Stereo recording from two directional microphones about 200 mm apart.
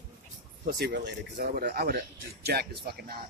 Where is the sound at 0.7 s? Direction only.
55° right (ahead or behind).